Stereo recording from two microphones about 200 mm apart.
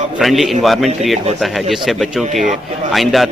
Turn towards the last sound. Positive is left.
turn(degrees=0)  # may be behind; listen again after turning